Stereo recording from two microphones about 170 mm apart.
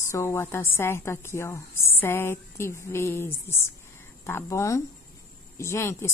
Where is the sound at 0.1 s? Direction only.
15° left (ahead or behind).